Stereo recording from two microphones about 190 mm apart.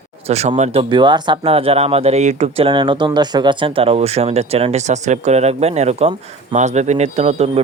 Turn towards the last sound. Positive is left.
turn(degrees=-35)  # may be behind; listen again after turning